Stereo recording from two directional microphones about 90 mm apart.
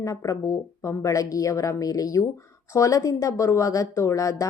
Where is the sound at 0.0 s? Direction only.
40° left (ahead or behind).